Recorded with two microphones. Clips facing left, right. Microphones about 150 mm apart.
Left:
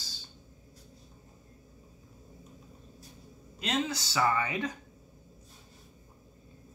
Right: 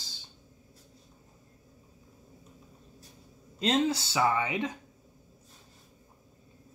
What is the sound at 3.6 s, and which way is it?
Speech, 30° right (ahead or behind).